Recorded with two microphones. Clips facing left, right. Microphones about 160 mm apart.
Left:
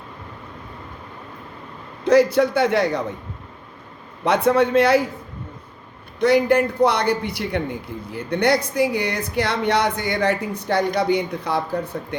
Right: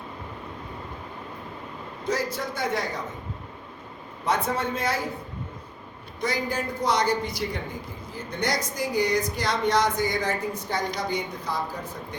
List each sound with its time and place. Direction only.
2.0 s a man's voice: 70° left (ahead or behind)
4.2 s a man's voice: 70° left (ahead or behind)
6.1 s a man's voice: 70° left (ahead or behind)